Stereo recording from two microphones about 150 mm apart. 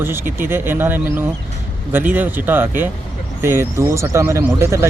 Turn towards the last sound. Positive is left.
turn(degrees=-20)  # may be behind; listen again after turning